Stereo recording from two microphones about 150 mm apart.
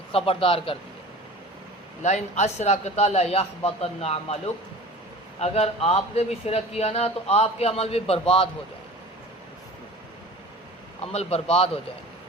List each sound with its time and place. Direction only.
0.1 s a man's voice: 40° left (ahead or behind)
2.0 s speech: 50° left (ahead or behind)
11.0 s a man's voice: 45° left (ahead or behind)